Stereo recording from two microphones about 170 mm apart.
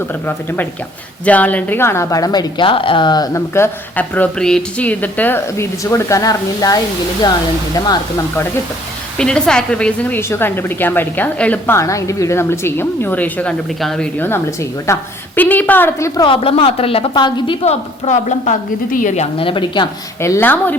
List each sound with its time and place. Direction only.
0.3 s a woman's voice: 10° left (ahead or behind)
9.1 s a woman's voice: 5° left (ahead or behind)
16.2 s a woman's voice: 30° left (ahead or behind)
20.2 s a woman's voice: 15° left (ahead or behind)